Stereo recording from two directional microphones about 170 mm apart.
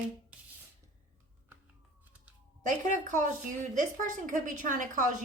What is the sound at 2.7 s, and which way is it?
Speech, 50° right (ahead or behind).